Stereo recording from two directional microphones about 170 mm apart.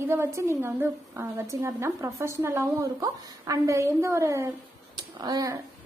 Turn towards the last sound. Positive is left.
turn(degrees=-20)  # may be behind; listen again after turning